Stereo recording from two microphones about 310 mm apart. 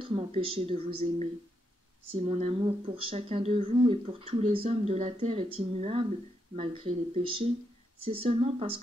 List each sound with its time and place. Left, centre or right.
0.0 s speech: centre